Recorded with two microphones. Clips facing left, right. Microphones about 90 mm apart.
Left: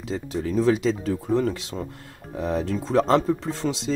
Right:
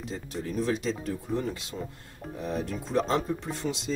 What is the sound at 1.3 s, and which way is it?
Speech, 90° left.